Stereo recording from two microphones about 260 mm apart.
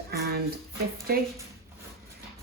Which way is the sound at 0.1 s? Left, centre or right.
Right.